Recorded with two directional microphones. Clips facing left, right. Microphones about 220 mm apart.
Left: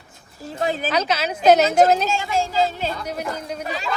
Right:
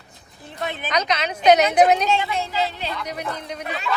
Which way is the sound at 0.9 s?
5° left (ahead or behind).